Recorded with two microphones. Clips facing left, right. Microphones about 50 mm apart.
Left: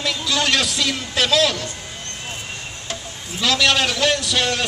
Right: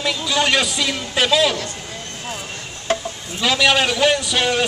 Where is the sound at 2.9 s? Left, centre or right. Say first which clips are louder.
Right 11 dB; right.